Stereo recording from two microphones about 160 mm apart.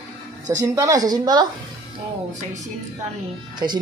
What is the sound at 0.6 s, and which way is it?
Speech, 20° right (ahead or behind).